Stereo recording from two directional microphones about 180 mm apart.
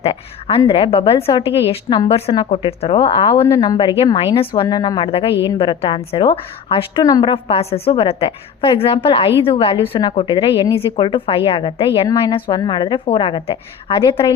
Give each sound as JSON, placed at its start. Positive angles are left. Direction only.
{"t": 0.0, "sound": "a woman's voice", "side_deg": 30}